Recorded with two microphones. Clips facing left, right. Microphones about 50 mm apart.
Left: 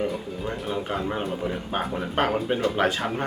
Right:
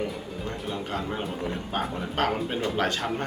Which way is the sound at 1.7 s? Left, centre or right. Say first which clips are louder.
Left 3 dB; centre.